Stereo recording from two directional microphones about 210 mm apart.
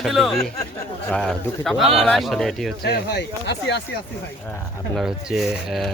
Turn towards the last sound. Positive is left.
turn(degrees=0)  # may be behind; listen again after turning